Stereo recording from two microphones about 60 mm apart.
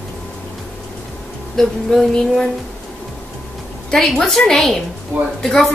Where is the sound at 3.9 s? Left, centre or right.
Centre.